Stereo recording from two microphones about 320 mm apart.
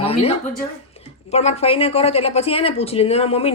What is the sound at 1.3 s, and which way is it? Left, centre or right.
Speech, centre.